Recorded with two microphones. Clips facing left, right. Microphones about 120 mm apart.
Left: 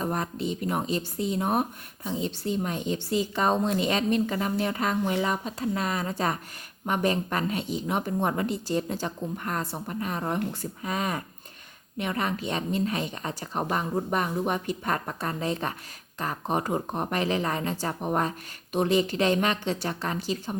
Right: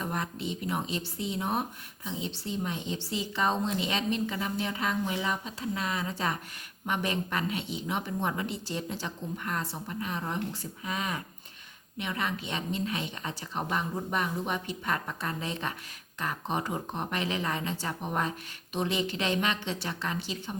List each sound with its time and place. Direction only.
0.0 s speech: 40° left (ahead or behind)